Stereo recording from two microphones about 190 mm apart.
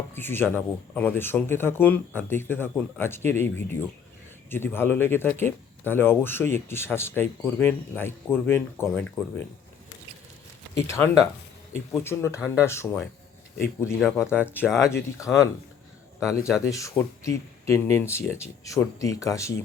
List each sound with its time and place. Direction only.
0.1 s speech: 10° left (ahead or behind)
10.8 s speech: 15° left (ahead or behind)
14.7 s speech: 5° right (ahead or behind)
15.3 s speech: 10° left (ahead or behind)